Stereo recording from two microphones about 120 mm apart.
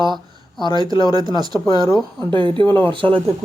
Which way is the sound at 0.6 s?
40° left (ahead or behind).